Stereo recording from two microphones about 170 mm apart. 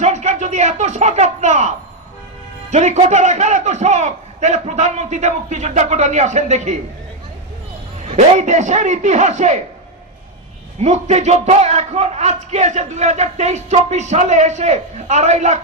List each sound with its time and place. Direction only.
0.0 s speech: 40° right (ahead or behind)
2.7 s a man's voice: 45° right (ahead or behind)
8.0 s a man's voice: 40° right (ahead or behind)
10.8 s speech: 40° right (ahead or behind)